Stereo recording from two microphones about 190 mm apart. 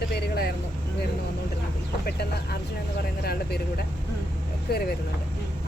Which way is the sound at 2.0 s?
55° left (ahead or behind).